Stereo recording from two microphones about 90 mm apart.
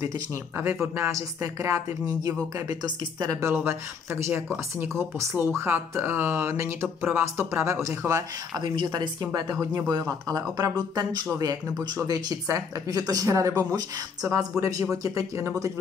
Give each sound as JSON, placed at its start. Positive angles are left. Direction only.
{"t": 0.0, "sound": "speech", "side_deg": -35}
{"t": 2.7, "sound": "speech", "side_deg": -50}
{"t": 8.5, "sound": "speech", "side_deg": -55}